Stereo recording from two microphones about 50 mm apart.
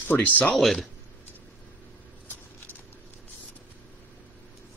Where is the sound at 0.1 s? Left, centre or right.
Left.